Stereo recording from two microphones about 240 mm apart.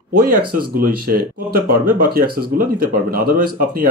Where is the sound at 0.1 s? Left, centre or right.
Right.